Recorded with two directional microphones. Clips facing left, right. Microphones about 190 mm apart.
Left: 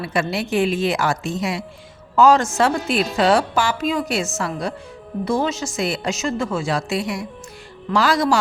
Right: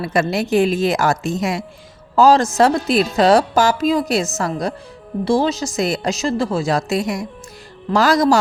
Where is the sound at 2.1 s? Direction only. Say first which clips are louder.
Right 2 dB; 35° right (ahead or behind).